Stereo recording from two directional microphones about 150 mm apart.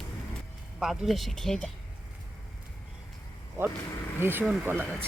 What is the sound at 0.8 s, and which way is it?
Speech, centre (ahead or behind).